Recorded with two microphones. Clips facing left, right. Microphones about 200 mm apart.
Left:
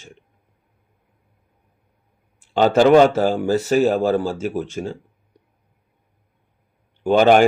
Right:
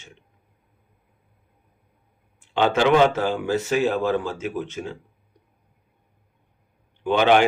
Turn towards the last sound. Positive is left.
turn(degrees=45)  # may be behind; listen again after turning